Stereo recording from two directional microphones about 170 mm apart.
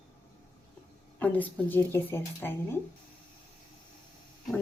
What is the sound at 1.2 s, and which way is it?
A woman's voice, 10° left (ahead or behind).